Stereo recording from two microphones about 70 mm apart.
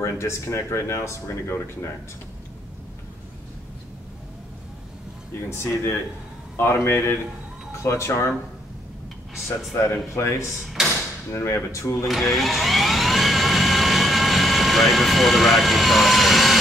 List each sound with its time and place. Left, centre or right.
0.0 s speech: left
5.5 s speech: left
10.8 s door: centre
11.3 s speech: left
12.1 s vehicle: centre